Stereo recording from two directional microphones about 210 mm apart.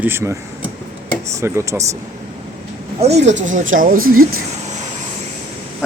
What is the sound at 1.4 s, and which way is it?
Speech, 15° right (ahead or behind).